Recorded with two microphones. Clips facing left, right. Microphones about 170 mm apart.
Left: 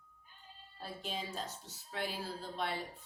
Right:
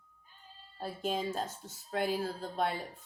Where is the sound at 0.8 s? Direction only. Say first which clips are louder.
Right 8 dB; 45° right (ahead or behind).